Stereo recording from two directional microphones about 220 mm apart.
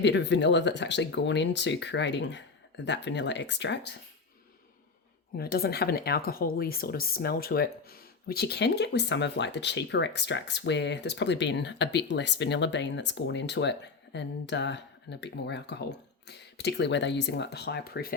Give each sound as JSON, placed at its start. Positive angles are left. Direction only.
{"t": 0.0, "sound": "speech", "side_deg": 55}
{"t": 5.4, "sound": "speech", "side_deg": 45}